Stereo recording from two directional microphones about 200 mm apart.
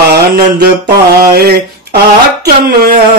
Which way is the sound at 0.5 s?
50° right (ahead or behind).